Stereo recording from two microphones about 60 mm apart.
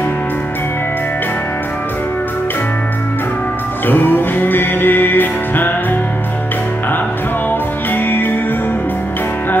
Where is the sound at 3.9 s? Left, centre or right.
Left.